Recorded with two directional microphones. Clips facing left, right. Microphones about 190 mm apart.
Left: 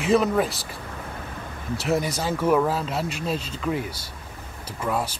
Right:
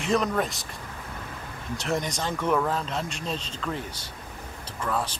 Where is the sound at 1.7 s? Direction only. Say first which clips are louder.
Left 4 dB; 5° left (ahead or behind).